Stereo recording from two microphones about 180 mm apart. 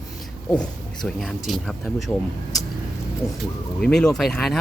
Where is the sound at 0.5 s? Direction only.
5° left (ahead or behind).